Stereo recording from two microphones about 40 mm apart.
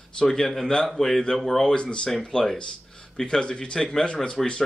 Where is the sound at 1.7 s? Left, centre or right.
Left.